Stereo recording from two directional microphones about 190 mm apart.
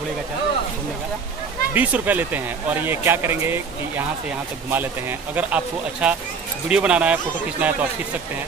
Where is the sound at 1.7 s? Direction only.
10° right (ahead or behind).